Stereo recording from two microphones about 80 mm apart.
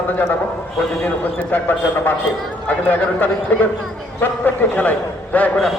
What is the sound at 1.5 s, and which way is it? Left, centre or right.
A man's voice, left.